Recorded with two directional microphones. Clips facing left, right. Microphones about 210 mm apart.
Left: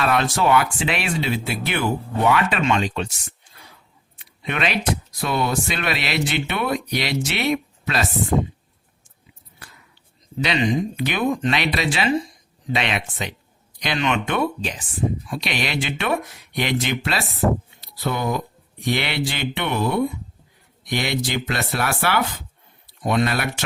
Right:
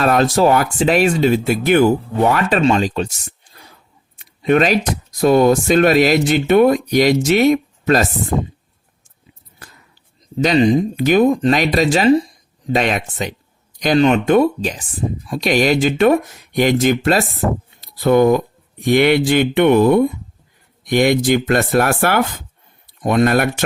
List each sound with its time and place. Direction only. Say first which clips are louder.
0.0 s speech: right 7 dB; 40° right (ahead or behind)
4.2 s a sound: right 11 dB; 40° right (ahead or behind)
5.2 s speech: right 12 dB; 45° right (ahead or behind)
10.3 s speech: right 8 dB; 40° right (ahead or behind)